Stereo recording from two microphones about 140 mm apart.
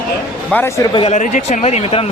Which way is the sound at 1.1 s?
60° left (ahead or behind).